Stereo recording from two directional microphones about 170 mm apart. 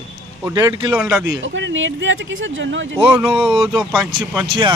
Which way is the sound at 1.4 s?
90° right.